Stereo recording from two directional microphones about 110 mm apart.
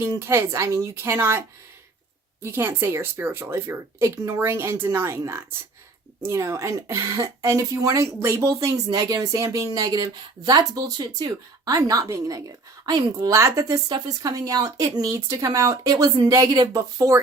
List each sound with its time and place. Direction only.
0.2 s speech: 20° right (ahead or behind)